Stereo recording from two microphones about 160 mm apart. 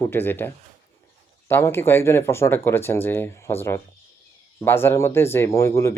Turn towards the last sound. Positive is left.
turn(degrees=20)  # may be behind; listen again after turning